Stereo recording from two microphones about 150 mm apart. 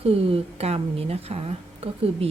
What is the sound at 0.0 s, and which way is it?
A woman's voice, 40° right (ahead or behind).